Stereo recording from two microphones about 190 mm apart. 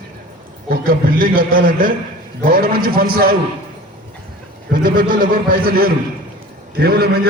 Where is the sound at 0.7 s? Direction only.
50° right (ahead or behind).